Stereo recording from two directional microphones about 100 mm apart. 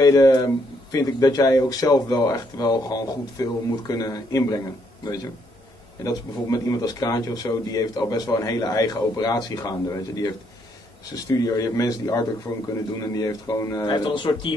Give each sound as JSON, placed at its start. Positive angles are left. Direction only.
{"t": 0.0, "sound": "a man's voice", "side_deg": 40}
{"t": 11.3, "sound": "a man's voice", "side_deg": 35}
{"t": 12.5, "sound": "a man's voice", "side_deg": 30}
{"t": 13.8, "sound": "speech", "side_deg": 50}